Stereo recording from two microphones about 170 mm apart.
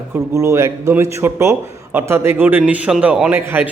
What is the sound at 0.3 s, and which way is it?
A man's voice, 15° right (ahead or behind).